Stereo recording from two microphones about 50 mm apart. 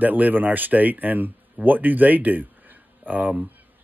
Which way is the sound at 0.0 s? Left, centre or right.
Right.